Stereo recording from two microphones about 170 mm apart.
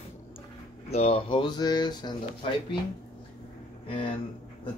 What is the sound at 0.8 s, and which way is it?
Speech, 35° left (ahead or behind).